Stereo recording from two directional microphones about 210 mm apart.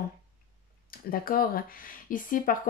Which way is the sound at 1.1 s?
45° left (ahead or behind).